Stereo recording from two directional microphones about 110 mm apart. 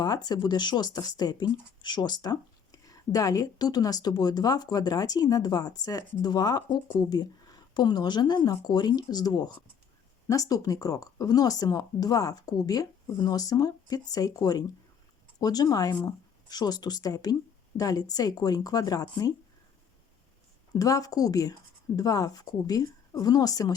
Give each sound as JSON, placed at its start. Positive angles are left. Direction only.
{"t": 0.0, "sound": "speech", "side_deg": 35}
{"t": 20.7, "sound": "speech", "side_deg": 35}